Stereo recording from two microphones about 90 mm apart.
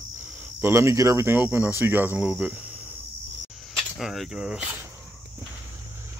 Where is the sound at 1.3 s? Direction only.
20° right (ahead or behind).